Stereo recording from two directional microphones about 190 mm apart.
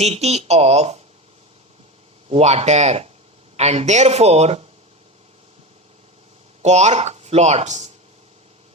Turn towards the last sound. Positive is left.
turn(degrees=-35)  # may be behind; listen again after turning